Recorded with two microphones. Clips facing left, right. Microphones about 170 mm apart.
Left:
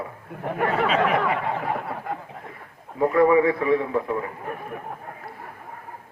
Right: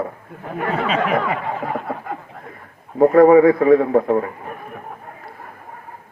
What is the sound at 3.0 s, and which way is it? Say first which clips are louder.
A man's voice: right 8 dB; 50° right (ahead or behind).